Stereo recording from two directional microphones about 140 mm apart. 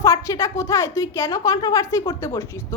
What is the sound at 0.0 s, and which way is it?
A woman's voice, 20° left (ahead or behind).